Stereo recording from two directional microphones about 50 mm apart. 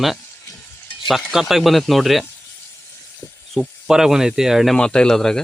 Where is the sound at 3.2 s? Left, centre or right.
Left.